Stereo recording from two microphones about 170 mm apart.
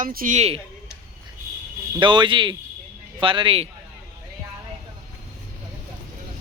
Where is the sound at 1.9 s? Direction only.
30° right (ahead or behind).